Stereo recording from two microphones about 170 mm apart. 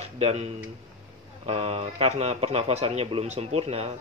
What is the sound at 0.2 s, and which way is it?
A man's voice, 40° right (ahead or behind).